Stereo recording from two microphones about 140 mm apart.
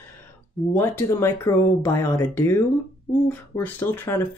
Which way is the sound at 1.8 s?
15° left (ahead or behind).